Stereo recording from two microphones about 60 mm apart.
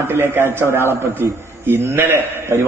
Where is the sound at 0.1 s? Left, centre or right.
Right.